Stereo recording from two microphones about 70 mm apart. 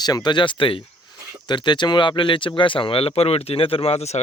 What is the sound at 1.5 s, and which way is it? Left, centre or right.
Speech, left.